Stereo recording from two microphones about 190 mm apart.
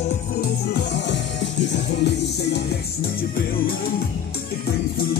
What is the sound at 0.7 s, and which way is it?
Music, 65° left (ahead or behind).